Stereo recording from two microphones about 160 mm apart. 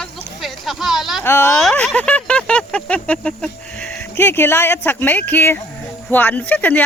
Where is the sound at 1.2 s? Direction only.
15° left (ahead or behind).